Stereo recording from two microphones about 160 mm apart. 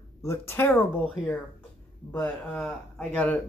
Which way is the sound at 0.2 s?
15° left (ahead or behind).